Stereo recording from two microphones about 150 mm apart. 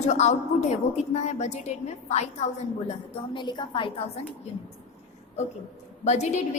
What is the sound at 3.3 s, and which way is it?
Speech, 30° left (ahead or behind).